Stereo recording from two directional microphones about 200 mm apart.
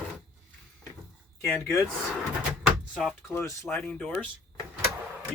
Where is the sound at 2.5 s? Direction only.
Centre (ahead or behind).